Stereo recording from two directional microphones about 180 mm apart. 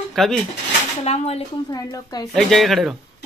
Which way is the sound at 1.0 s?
35° left (ahead or behind).